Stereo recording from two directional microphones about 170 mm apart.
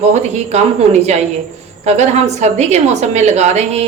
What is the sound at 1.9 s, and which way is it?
A woman's voice, 40° right (ahead or behind).